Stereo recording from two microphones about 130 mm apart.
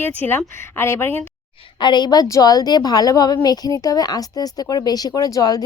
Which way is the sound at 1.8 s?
35° left (ahead or behind).